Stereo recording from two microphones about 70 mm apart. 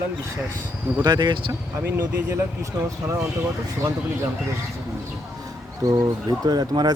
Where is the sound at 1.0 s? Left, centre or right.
Right.